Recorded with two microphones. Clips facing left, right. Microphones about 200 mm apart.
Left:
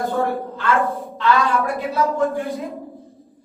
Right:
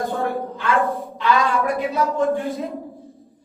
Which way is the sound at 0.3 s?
15° right (ahead or behind).